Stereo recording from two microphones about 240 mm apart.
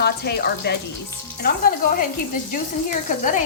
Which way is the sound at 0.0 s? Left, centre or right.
Left.